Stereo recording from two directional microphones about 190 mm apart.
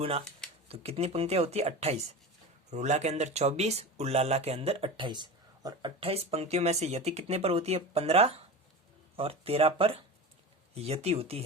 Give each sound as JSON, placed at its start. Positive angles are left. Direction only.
{"t": 0.7, "sound": "speech", "side_deg": -30}